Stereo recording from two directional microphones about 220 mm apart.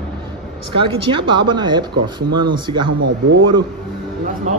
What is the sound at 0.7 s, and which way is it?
Speech, 25° right (ahead or behind).